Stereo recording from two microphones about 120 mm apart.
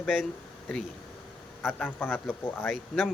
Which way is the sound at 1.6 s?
10° left (ahead or behind).